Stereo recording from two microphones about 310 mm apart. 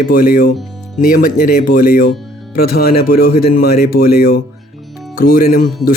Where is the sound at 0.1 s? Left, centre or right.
Left.